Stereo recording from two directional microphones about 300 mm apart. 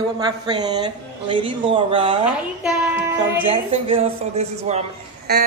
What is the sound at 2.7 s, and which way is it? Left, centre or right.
Child singing, centre.